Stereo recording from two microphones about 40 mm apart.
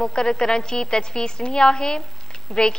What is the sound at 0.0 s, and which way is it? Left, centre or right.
A woman's voice, centre.